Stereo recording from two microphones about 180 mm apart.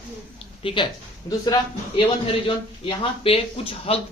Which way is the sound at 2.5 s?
30° left (ahead or behind).